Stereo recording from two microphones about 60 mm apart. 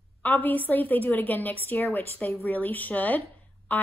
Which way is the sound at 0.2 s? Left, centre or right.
Left.